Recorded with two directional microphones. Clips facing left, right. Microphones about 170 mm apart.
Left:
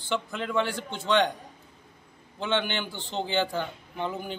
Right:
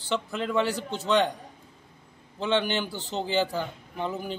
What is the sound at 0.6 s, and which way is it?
Speech, 40° right (ahead or behind).